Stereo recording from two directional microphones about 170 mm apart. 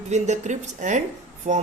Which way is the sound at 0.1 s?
45° right (ahead or behind).